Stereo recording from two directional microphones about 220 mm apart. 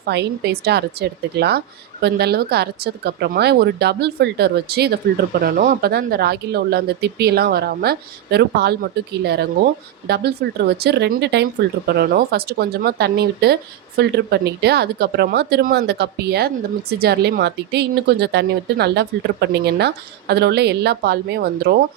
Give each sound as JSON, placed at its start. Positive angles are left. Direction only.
{"t": 0.0, "sound": "a woman's voice", "side_deg": -50}